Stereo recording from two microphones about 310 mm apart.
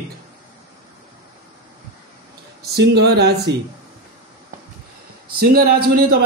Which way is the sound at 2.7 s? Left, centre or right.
Right.